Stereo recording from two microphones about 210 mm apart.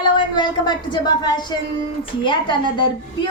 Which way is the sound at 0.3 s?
20° left (ahead or behind).